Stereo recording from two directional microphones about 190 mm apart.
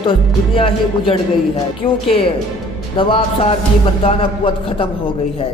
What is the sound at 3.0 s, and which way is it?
Speech, 30° left (ahead or behind).